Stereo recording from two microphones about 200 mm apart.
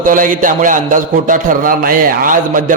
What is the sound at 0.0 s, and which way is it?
A man's voice, 40° right (ahead or behind).